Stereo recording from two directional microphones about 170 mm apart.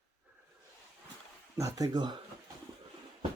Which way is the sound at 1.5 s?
20° right (ahead or behind).